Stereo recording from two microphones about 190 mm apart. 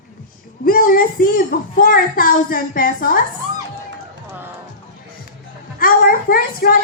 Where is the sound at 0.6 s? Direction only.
50° left (ahead or behind).